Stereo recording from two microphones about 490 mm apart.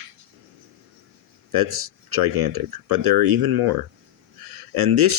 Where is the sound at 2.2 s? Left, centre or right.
Right.